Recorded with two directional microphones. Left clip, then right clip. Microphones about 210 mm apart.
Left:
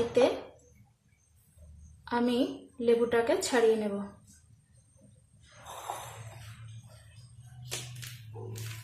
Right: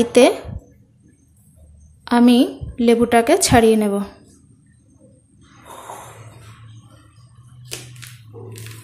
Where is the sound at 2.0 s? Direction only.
40° right (ahead or behind).